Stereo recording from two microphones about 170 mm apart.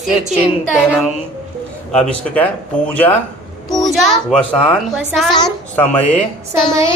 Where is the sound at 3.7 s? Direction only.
Centre (ahead or behind).